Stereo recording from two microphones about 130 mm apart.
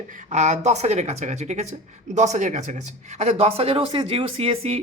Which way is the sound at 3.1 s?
55° right (ahead or behind).